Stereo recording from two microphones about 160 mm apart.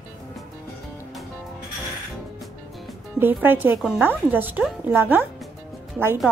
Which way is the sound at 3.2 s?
10° right (ahead or behind).